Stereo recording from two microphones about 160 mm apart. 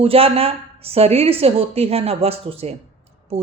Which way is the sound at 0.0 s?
35° right (ahead or behind).